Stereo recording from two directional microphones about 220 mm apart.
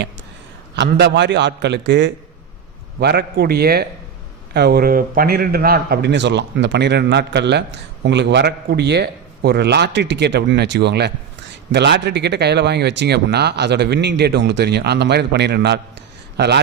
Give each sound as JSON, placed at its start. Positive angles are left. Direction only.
{"t": 0.8, "sound": "speech", "side_deg": -50}